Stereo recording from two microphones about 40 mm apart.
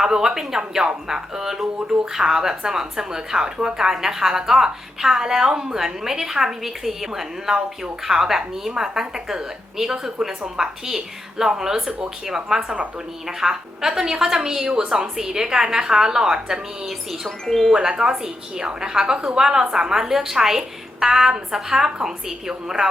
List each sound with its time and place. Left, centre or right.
0.0 s a woman's voice: centre
17.2 s speech: centre
17.7 s a woman's voice: centre